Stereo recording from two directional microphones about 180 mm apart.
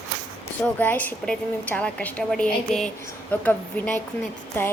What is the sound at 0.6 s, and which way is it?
A woman's voice, 10° left (ahead or behind).